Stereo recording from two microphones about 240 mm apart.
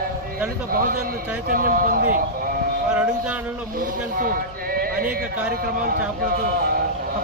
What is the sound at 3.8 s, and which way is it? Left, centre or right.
A man's voice, right.